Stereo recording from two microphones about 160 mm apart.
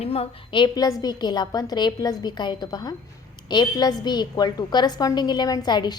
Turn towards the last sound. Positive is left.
turn(degrees=25)  # may be behind; listen again after turning